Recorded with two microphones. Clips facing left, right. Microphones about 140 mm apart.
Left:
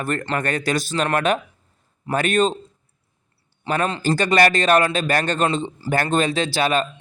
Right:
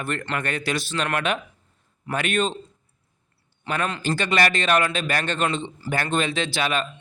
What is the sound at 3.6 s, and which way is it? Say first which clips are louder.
A man's voice: left 4 dB; 35° left (ahead or behind).